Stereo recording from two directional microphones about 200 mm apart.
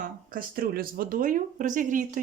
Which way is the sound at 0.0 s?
45° right (ahead or behind).